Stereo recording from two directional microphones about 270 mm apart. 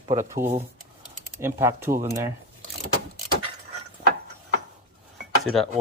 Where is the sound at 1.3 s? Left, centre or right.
Centre.